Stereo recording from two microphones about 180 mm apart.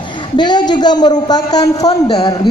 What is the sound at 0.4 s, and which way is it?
A man's voice, 25° left (ahead or behind).